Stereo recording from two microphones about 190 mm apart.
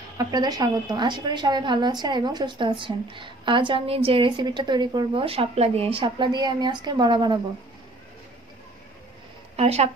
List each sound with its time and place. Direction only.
0.2 s a woman's voice: 20° right (ahead or behind)
9.6 s speech: 35° right (ahead or behind)